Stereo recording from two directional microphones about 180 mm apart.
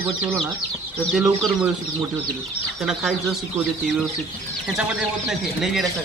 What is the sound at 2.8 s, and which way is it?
Speech, centre (ahead or behind).